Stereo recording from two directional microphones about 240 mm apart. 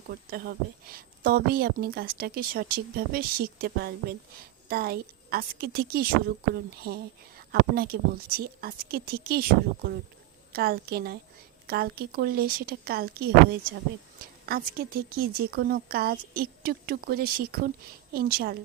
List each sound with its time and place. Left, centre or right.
0.1 s speech: right